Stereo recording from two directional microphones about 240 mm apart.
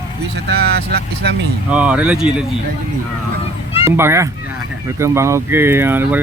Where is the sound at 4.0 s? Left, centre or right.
Centre.